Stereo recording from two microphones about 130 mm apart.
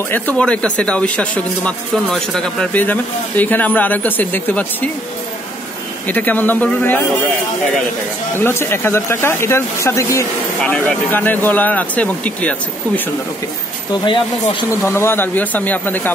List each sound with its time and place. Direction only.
0.1 s speech: 10° left (ahead or behind)
6.0 s speech: 15° left (ahead or behind)
8.4 s speech: 15° left (ahead or behind)
14.0 s speech: 40° left (ahead or behind)
14.8 s speech: 20° left (ahead or behind)